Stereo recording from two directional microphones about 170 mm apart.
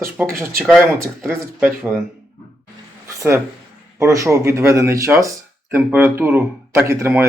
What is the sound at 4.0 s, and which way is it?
Speech, 15° right (ahead or behind).